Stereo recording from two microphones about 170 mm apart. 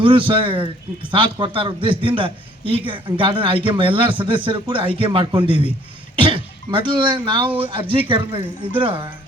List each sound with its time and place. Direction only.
0.0 s a man's voice: 30° right (ahead or behind)